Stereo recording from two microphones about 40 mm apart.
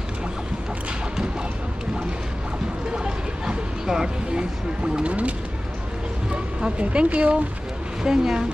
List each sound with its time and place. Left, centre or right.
2.9 s a sound: centre
6.3 s speech: right
8.0 s speech: centre